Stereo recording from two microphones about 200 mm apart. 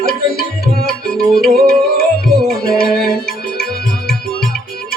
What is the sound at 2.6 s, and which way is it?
Music, 50° left (ahead or behind).